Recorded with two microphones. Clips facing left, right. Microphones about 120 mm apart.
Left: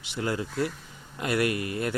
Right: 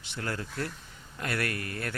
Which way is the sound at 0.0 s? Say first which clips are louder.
Left 6 dB; 15° left (ahead or behind).